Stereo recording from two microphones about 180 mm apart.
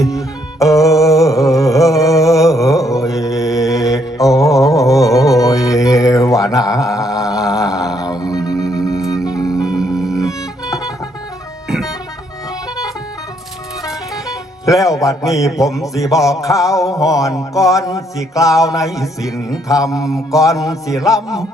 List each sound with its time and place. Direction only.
0.6 s a sound: 20° left (ahead or behind)
2.6 s mantra: 20° left (ahead or behind)
7.3 s music: 20° left (ahead or behind)
9.6 s music: 5° right (ahead or behind)
11.7 s guitar: centre (ahead or behind)
14.6 s music: 20° left (ahead or behind)
15.8 s mantra: 20° left (ahead or behind)